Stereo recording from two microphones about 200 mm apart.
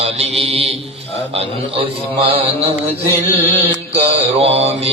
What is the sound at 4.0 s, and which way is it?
Mantra, 30° right (ahead or behind).